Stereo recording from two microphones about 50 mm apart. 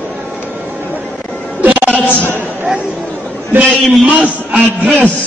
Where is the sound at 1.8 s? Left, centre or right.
Left.